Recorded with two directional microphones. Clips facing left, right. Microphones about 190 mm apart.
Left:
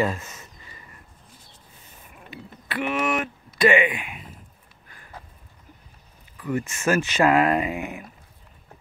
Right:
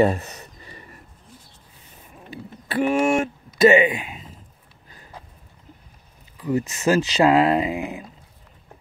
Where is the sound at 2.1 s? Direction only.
30° right (ahead or behind).